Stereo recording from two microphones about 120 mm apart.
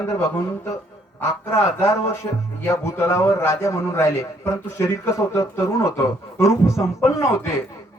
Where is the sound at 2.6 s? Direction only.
25° left (ahead or behind).